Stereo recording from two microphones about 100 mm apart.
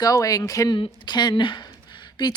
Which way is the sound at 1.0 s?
45° left (ahead or behind).